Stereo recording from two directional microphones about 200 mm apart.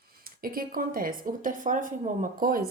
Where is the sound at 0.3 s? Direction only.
45° right (ahead or behind).